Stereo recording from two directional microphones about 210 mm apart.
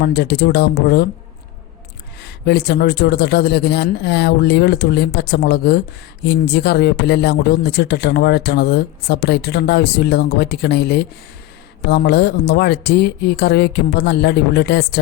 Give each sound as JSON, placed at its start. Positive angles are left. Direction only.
{"t": 0.0, "sound": "speech", "side_deg": 50}
{"t": 2.2, "sound": "speech", "side_deg": 50}